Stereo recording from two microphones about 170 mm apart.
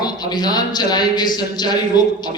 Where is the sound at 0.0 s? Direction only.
25° left (ahead or behind).